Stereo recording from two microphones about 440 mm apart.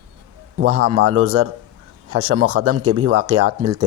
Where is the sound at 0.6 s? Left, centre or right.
Right.